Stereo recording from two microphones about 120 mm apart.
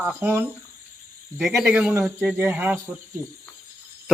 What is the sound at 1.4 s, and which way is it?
Speech, centre (ahead or behind).